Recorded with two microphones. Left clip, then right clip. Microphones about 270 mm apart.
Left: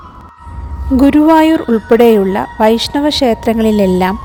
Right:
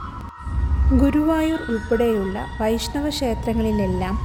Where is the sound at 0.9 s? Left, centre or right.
Left.